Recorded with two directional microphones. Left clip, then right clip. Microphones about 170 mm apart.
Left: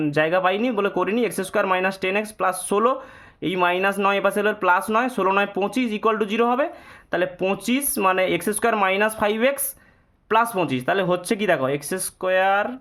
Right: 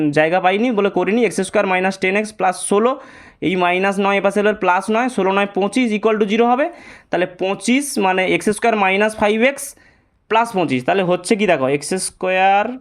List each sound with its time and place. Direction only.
0.0 s speech: 25° right (ahead or behind)